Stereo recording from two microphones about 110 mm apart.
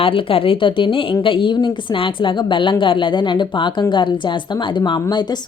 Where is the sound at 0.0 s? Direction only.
55° left (ahead or behind).